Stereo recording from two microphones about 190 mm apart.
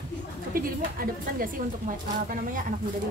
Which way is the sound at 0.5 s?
50° right (ahead or behind).